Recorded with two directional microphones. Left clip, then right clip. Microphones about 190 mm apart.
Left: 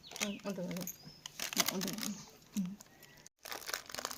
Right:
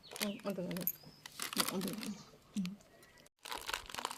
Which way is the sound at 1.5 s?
10° left (ahead or behind).